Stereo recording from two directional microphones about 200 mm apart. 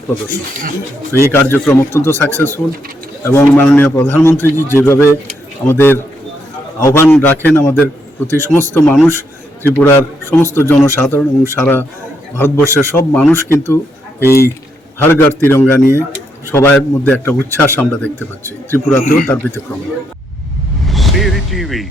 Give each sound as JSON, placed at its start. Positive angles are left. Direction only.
{"t": 1.3, "sound": "a man's voice", "side_deg": 10}
{"t": 19.0, "sound": "a man's voice", "side_deg": 45}
{"t": 20.8, "sound": "music", "side_deg": 0}